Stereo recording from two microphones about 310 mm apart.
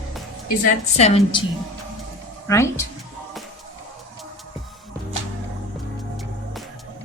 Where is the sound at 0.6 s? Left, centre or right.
Left.